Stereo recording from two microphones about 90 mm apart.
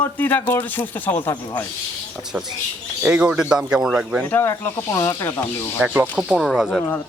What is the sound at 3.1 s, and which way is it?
Speech, 10° right (ahead or behind).